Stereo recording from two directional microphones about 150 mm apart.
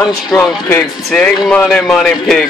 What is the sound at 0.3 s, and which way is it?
Speech, 5° left (ahead or behind).